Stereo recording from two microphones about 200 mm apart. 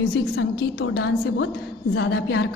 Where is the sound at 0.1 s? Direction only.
70° left (ahead or behind).